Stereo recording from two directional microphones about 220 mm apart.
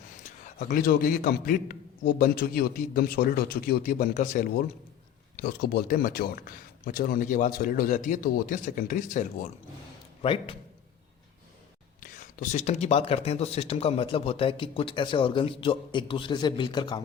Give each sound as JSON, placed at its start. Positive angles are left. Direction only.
{"t": 0.3, "sound": "a man's voice", "side_deg": 35}
{"t": 10.2, "sound": "speech", "side_deg": 25}
{"t": 11.9, "sound": "speech", "side_deg": 40}